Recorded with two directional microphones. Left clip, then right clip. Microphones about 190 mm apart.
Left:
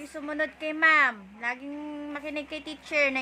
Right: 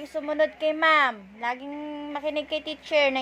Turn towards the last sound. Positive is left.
turn(degrees=-10)  # may be behind; listen again after turning